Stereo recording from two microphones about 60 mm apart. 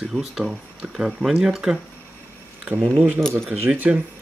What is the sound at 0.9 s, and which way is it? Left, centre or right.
Speech, centre.